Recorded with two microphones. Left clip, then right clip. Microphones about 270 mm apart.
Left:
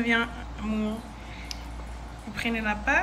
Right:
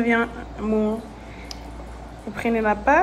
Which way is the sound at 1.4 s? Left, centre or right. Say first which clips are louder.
Right 1 dB; centre.